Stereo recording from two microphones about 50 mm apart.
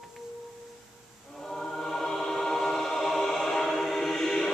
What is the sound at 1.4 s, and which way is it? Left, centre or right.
Music, centre.